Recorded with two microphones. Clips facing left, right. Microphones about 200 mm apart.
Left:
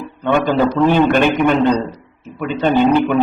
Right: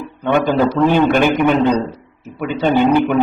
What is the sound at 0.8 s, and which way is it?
A man's voice, 15° right (ahead or behind).